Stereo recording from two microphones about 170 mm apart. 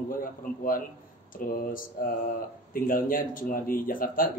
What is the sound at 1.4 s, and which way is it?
Speech, 55° left (ahead or behind).